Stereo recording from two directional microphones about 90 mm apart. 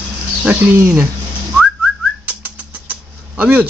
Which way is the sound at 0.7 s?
30° right (ahead or behind).